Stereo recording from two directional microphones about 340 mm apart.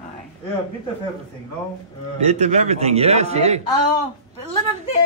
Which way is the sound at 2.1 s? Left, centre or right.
Centre.